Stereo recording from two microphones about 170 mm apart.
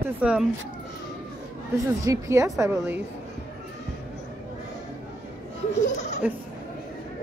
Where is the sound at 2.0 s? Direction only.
20° right (ahead or behind).